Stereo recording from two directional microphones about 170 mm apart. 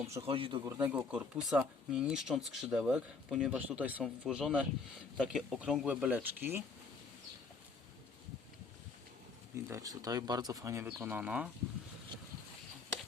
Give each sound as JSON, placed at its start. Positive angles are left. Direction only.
{"t": 0.2, "sound": "speech", "side_deg": -35}
{"t": 0.9, "sound": "speech", "side_deg": -10}
{"t": 9.6, "sound": "speech", "side_deg": -20}